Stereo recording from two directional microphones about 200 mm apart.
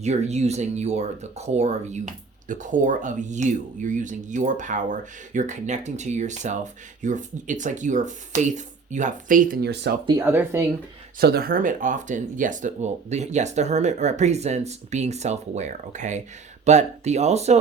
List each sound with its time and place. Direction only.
0.0 s speech: 35° right (ahead or behind); by 9.9 s 55° right (ahead or behind)
10.1 s speech: 15° right (ahead or behind)
11.2 s speech: 50° right (ahead or behind); by 17.6 s 35° right (ahead or behind)